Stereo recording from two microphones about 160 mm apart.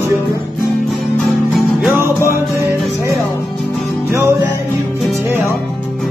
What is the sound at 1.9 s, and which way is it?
Music, 15° right (ahead or behind).